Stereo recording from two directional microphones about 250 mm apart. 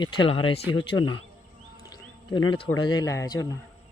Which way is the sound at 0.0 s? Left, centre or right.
Centre.